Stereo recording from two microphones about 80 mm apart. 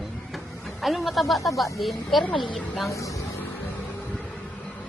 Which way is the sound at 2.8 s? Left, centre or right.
Left.